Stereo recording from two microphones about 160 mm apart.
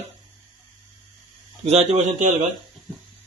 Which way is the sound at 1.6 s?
45° right (ahead or behind).